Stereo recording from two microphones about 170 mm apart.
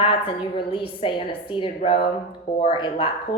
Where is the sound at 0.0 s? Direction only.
30° left (ahead or behind).